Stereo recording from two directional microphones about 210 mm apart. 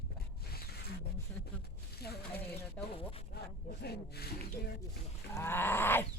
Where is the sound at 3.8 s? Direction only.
50° left (ahead or behind).